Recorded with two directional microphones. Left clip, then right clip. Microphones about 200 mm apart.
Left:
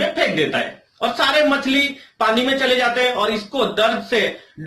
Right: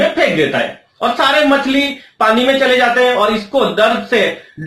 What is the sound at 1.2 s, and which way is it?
Speech, 15° left (ahead or behind).